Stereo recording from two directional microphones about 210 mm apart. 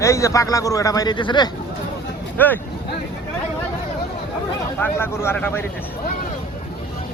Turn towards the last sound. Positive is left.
turn(degrees=10)  # may be behind; listen again after turning